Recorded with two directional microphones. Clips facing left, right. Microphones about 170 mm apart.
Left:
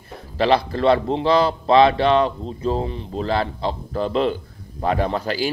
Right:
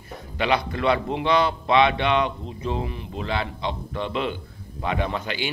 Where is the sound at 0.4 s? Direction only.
35° left (ahead or behind).